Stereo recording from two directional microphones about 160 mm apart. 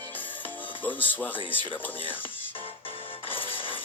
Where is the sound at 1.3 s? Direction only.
30° left (ahead or behind).